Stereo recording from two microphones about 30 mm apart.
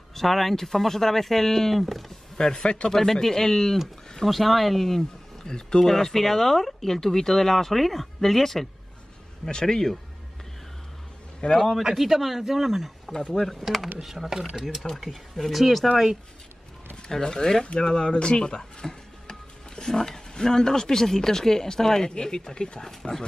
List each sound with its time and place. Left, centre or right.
0.1 s speech: centre
2.3 s speech: left
4.3 s speech: centre
5.4 s speech: left
5.9 s speech: centre
9.5 s speech: left
11.5 s speech: centre
11.8 s speech: centre
13.3 s speech: centre
14.0 s speech: centre
17.2 s speech: left
17.7 s speech: left